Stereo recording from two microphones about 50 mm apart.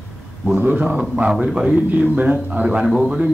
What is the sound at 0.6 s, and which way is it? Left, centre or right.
Speech, right.